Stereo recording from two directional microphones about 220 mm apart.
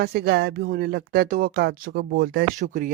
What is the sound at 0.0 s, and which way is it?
Speech, 45° right (ahead or behind).